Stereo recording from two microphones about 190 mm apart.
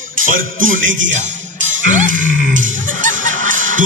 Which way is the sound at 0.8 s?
80° right.